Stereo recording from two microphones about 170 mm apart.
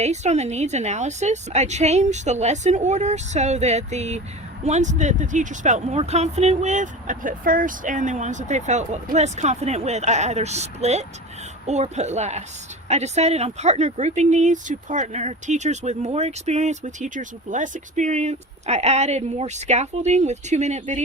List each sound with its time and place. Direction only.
0.0 s a woman's voice: 40° right (ahead or behind)